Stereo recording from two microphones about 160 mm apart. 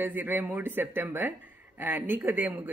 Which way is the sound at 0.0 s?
10° right (ahead or behind).